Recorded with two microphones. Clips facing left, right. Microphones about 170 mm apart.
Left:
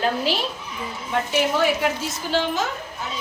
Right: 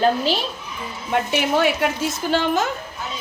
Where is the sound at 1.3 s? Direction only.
65° right (ahead or behind).